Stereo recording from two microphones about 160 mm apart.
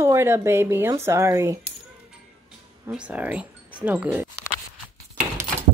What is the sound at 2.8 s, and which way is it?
Speech, 5° right (ahead or behind).